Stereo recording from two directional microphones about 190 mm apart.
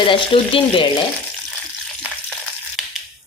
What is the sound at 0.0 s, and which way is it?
Speech, 25° left (ahead or behind).